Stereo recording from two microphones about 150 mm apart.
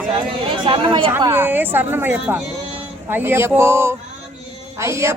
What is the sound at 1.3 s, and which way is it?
A woman's voice, 15° right (ahead or behind).